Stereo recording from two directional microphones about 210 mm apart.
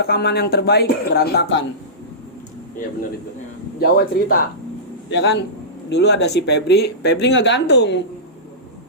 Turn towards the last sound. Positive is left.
turn(degrees=55)  # may be behind; listen again after turning